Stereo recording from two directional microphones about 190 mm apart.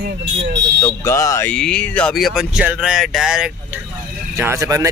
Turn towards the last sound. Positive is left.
turn(degrees=-15)  # may be behind; listen again after turning